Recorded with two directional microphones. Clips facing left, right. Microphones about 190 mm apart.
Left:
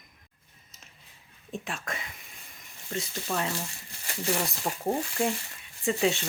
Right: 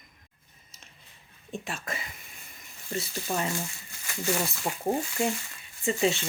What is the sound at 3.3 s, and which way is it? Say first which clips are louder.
Speech: even; 15° right (ahead or behind).